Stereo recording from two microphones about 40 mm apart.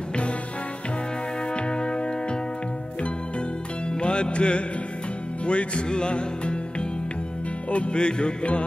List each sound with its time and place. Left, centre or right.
1.5 s music: left
3.9 s music: left
7.7 s music: left